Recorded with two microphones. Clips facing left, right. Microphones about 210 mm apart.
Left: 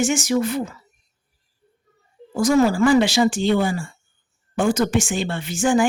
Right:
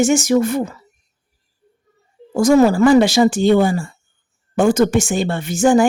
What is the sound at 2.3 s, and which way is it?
Speech, 45° right (ahead or behind).